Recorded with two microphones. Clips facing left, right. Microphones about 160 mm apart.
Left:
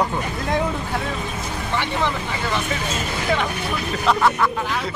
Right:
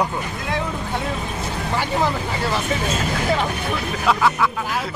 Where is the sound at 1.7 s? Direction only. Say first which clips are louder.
Right 2 dB; 40° right (ahead or behind).